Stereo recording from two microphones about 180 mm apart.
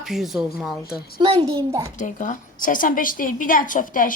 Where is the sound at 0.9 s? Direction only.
60° left (ahead or behind).